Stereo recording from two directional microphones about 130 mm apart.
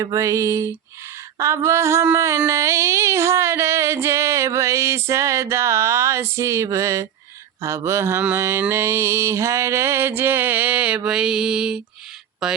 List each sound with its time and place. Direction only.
0.0 s a sound: 25° right (ahead or behind)
8.2 s mantra: 15° right (ahead or behind)
12.4 s a woman's voice: 5° right (ahead or behind)